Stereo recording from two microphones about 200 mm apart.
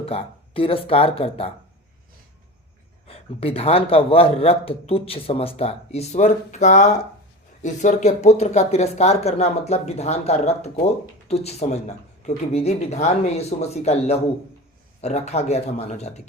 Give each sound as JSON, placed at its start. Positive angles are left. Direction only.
{"t": 0.0, "sound": "a man's voice", "side_deg": 30}
{"t": 3.1, "sound": "a man's voice", "side_deg": 30}